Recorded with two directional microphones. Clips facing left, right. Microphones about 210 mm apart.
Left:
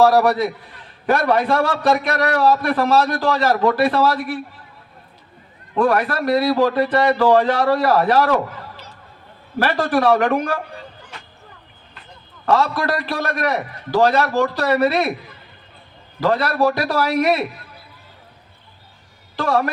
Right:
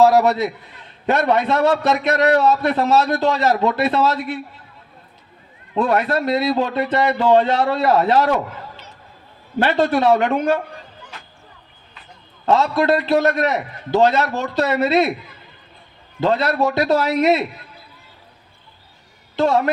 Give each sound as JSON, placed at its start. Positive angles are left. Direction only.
{"t": 0.0, "sound": "a man's voice", "side_deg": -20}
{"t": 5.7, "sound": "a man's voice", "side_deg": -25}
{"t": 9.6, "sound": "a man's voice", "side_deg": -25}
{"t": 12.5, "sound": "a man's voice", "side_deg": -25}
{"t": 16.2, "sound": "a man's voice", "side_deg": -25}
{"t": 19.4, "sound": "a man's voice", "side_deg": -25}